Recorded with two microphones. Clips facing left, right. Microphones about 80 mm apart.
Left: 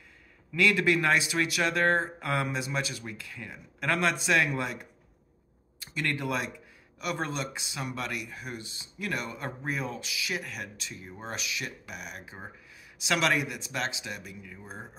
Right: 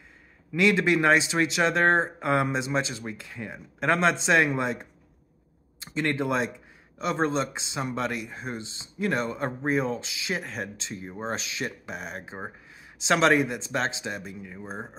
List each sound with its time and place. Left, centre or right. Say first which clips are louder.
0.5 s speech: right 3 dB; right